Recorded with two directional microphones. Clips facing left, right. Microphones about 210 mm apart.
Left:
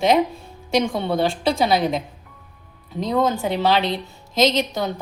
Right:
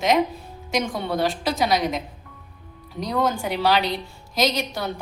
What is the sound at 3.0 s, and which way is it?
A woman's voice, 25° left (ahead or behind).